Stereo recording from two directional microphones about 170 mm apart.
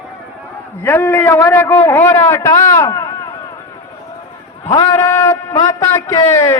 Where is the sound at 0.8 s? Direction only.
15° left (ahead or behind).